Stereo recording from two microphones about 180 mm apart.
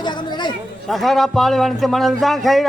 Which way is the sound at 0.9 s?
Centre (ahead or behind).